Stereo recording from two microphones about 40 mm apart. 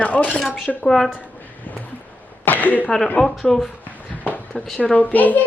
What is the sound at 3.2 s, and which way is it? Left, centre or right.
Speech, left.